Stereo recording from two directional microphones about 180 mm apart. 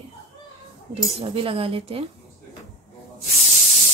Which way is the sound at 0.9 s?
30° right (ahead or behind).